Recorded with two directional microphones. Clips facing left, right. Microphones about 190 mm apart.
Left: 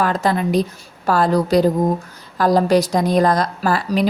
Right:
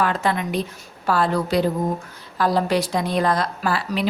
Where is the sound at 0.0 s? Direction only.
40° left (ahead or behind).